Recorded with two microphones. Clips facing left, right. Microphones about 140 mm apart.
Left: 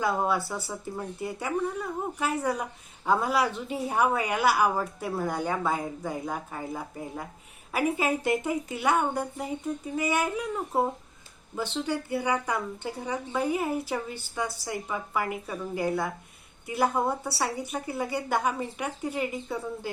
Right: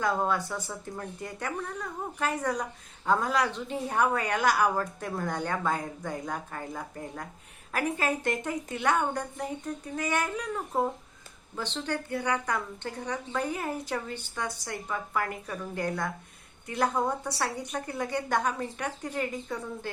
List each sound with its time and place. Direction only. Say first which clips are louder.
0.0 s a woman's voice: left 1 dB; 10° left (ahead or behind)